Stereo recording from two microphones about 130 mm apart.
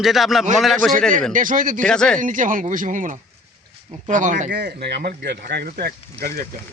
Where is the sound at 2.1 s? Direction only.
90° right.